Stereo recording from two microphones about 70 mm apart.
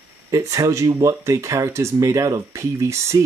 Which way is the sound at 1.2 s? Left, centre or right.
Right.